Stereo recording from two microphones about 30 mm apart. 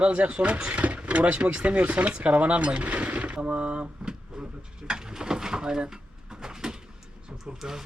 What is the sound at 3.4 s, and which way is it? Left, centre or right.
Speech, right.